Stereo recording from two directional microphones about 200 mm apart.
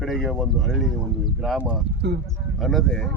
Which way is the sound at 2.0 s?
60° right (ahead or behind).